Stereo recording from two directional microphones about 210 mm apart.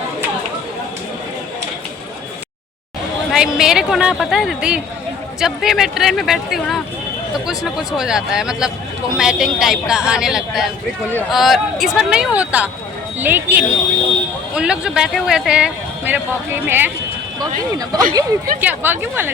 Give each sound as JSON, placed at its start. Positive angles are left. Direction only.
{"t": 3.3, "sound": "a man's voice", "side_deg": -5}